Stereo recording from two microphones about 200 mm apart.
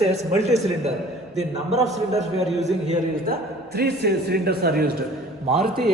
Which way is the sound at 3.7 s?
55° right (ahead or behind).